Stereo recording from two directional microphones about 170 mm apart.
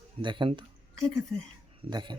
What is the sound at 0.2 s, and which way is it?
Speech, 30° right (ahead or behind).